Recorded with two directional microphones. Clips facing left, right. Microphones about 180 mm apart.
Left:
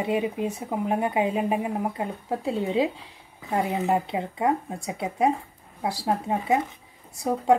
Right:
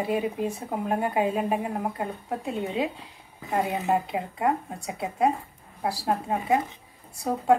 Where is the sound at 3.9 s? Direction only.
25° left (ahead or behind).